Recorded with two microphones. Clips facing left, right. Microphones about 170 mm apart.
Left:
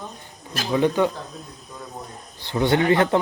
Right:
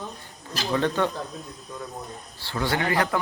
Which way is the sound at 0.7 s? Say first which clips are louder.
Left 4 dB; 15° left (ahead or behind).